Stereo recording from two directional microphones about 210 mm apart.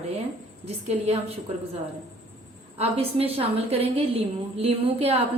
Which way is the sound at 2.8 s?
30° right (ahead or behind).